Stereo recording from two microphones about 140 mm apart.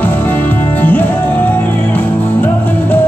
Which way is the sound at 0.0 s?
15° left (ahead or behind).